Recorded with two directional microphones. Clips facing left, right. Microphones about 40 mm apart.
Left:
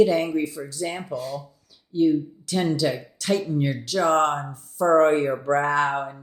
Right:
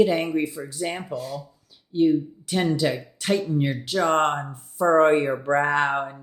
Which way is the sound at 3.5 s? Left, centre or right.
Right.